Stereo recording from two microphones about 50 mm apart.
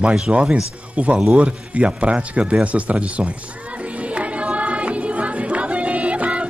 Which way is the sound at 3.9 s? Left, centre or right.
Right.